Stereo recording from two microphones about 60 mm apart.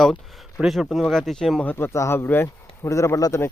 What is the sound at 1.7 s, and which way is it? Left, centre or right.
Speech, left.